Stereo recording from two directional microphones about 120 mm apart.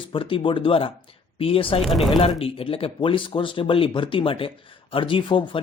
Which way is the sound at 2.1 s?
50° left (ahead or behind).